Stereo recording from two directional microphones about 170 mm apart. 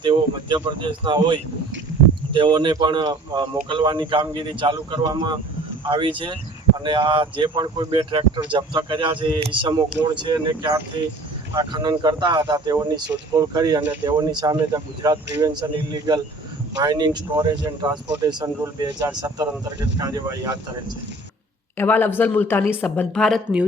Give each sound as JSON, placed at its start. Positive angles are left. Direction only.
{"t": 0.0, "sound": "speech", "side_deg": -30}
{"t": 21.8, "sound": "a woman's voice", "side_deg": 10}